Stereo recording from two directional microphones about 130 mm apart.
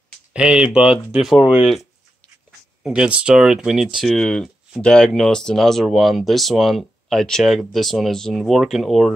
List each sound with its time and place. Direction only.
0.3 s speech: 10° right (ahead or behind)
1.4 s speech: 35° left (ahead or behind)
2.8 s speech: 5° right (ahead or behind)